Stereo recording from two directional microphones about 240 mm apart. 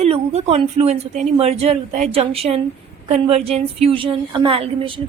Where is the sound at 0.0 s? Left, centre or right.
Right.